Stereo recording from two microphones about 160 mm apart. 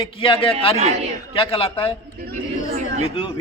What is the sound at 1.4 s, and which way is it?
Speech, 35° left (ahead or behind).